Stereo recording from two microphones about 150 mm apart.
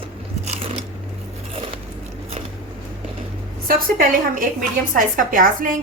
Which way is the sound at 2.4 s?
40° right (ahead or behind).